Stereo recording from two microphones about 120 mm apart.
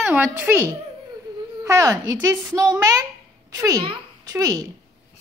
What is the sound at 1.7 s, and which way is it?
Speech, 25° right (ahead or behind).